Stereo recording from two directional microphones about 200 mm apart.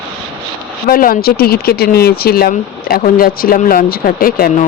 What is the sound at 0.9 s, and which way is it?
Speech, 45° left (ahead or behind).